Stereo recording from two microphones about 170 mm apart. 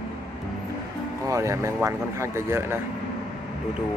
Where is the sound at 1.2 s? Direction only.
15° right (ahead or behind).